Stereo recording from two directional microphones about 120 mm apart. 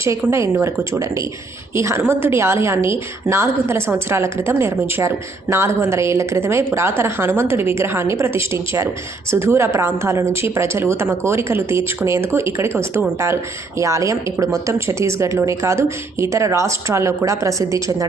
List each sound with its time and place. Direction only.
0.0 s a woman's voice: 20° right (ahead or behind)